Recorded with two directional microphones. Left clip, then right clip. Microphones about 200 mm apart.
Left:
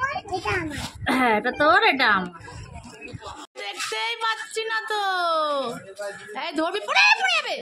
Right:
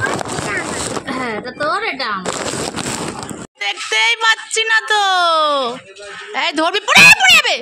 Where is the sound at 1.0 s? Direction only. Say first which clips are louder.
Left 2 dB; 10° right (ahead or behind).